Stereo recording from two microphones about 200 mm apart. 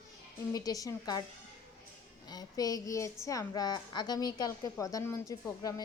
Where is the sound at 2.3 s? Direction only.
20° left (ahead or behind).